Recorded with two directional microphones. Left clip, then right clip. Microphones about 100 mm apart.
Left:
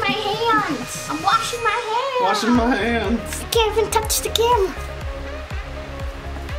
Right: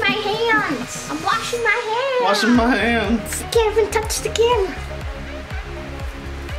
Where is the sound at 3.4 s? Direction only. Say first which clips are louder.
Right 2 dB; 15° left (ahead or behind).